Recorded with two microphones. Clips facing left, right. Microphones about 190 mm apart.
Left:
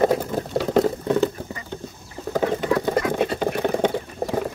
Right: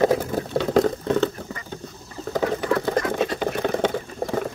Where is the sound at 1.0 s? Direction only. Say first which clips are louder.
Left 1 dB; 15° left (ahead or behind).